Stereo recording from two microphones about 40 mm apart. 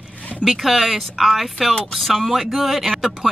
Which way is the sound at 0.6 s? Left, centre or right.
Centre.